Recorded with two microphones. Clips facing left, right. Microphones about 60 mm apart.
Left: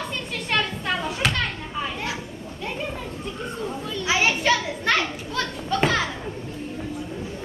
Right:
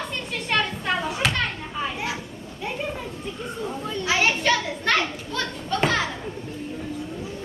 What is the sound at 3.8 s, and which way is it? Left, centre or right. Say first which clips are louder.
Children playing: right 1 dB; right.